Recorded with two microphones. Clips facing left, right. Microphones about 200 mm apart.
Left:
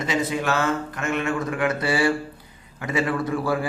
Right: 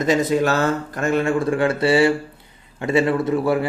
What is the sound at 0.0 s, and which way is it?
A man's voice, 40° right (ahead or behind).